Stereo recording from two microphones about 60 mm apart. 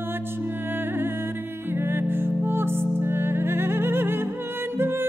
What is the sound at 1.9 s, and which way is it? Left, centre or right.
Music, right.